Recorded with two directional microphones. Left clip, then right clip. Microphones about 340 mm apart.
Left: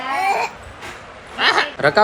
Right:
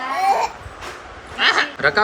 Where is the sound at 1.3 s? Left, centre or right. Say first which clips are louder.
Even; centre.